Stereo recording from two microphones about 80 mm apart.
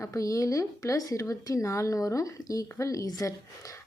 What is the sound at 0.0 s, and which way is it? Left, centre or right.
A woman's voice, left.